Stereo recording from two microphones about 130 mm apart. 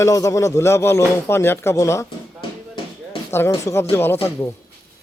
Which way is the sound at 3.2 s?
20° left (ahead or behind).